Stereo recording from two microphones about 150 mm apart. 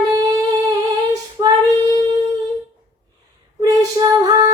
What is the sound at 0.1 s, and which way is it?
Humming, 25° right (ahead or behind).